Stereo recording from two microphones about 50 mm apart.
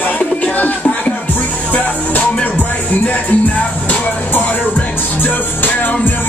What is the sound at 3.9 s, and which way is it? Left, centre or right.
Music, left.